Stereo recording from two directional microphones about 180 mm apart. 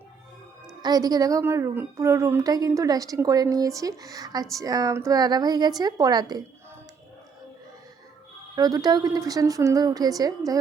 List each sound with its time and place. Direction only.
0.8 s a woman's voice: 20° right (ahead or behind)
8.5 s a woman's voice: 20° right (ahead or behind)